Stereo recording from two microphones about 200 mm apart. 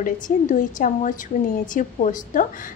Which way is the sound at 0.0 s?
40° left (ahead or behind).